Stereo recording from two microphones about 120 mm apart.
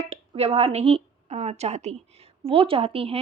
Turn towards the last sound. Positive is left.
turn(degrees=-55)  # may be behind; listen again after turning